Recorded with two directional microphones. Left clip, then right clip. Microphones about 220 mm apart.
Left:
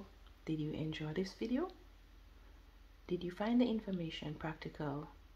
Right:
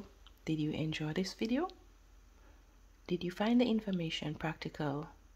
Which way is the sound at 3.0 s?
40° right (ahead or behind).